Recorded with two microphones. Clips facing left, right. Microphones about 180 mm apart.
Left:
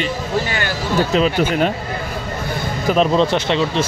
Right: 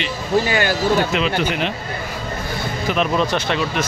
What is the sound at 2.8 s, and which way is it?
Speech, 35° left (ahead or behind).